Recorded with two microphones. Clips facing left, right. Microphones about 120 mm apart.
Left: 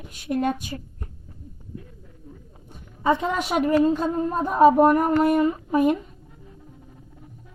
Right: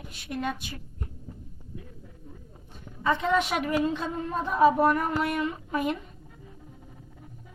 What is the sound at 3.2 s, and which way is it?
A woman's voice, 45° left (ahead or behind).